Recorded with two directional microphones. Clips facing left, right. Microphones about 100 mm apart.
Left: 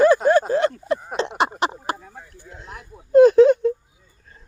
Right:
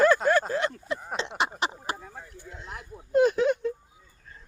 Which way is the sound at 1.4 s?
60° left (ahead or behind).